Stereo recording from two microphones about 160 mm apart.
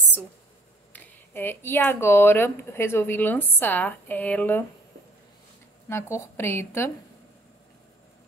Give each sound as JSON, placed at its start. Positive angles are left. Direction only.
{"t": 0.9, "sound": "speech", "side_deg": 15}
{"t": 5.9, "sound": "speech", "side_deg": 15}